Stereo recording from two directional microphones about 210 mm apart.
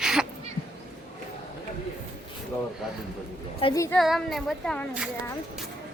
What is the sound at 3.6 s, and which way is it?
Speech, 15° left (ahead or behind).